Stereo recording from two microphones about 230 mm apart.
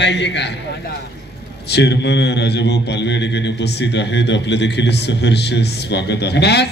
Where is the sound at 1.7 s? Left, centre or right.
Left.